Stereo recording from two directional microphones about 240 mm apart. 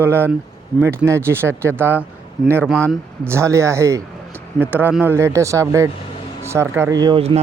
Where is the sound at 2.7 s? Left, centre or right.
Centre.